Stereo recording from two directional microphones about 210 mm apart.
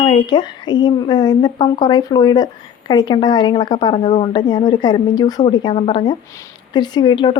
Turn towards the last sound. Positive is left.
turn(degrees=20)  # may be behind; listen again after turning